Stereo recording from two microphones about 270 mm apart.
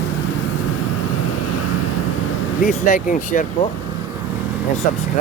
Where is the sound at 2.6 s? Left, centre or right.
Left.